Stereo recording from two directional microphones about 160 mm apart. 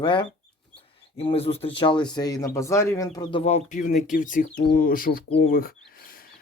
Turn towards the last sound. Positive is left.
turn(degrees=65)  # may be behind; listen again after turning